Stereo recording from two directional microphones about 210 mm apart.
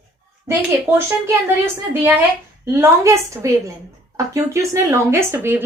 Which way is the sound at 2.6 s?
10° right (ahead or behind).